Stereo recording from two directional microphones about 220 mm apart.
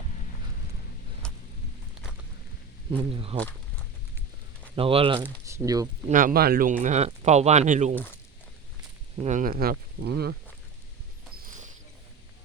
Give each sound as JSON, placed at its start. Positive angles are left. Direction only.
{"t": 1.2, "sound": "a sound", "side_deg": 5}
{"t": 2.9, "sound": "speech", "side_deg": -25}
{"t": 4.7, "sound": "speech", "side_deg": -25}
{"t": 5.5, "sound": "speech", "side_deg": -15}
{"t": 6.1, "sound": "speech", "side_deg": -35}
{"t": 9.1, "sound": "speech", "side_deg": -30}
{"t": 11.4, "sound": "basketball bounce", "side_deg": -35}